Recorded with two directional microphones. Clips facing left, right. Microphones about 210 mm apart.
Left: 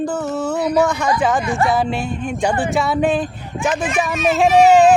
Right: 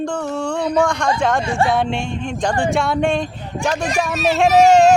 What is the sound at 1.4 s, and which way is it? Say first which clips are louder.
Music: even; 30° right (ahead or behind).